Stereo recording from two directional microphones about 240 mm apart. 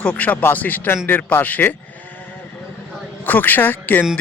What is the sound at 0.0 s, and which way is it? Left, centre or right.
Speech, centre.